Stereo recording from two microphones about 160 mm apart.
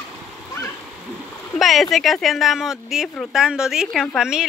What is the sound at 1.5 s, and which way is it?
Speech, centre (ahead or behind).